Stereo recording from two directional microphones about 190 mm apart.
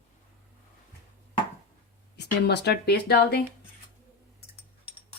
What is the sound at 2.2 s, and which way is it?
Speech, 60° left (ahead or behind).